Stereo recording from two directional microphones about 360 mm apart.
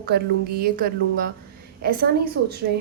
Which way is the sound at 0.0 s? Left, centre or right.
Right.